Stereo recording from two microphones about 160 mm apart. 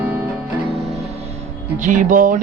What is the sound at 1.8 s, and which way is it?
Speech, 55° right (ahead or behind).